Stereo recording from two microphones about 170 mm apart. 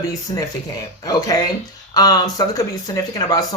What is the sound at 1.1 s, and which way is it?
Speech, 20° left (ahead or behind).